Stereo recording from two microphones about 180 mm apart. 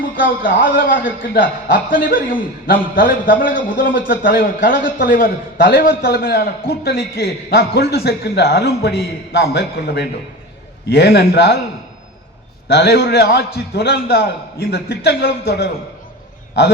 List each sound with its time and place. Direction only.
0.2 s a man's voice: 50° left (ahead or behind); by 11.5 s 70° left (ahead or behind)
12.6 s a man's voice: 65° left (ahead or behind)